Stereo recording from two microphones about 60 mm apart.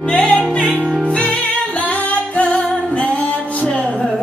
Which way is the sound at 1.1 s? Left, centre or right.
Centre.